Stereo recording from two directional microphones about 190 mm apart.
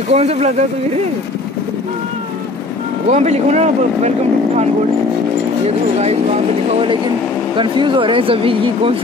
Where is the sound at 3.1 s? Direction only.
35° right (ahead or behind).